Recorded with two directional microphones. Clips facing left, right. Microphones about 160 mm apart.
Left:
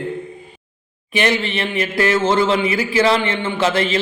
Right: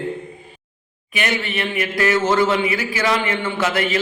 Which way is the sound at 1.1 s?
30° left (ahead or behind).